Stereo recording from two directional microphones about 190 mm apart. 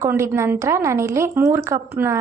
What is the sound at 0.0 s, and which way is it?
A woman's voice, 10° right (ahead or behind).